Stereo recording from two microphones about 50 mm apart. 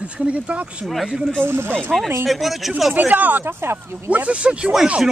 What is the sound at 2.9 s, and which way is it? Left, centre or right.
Speech, right.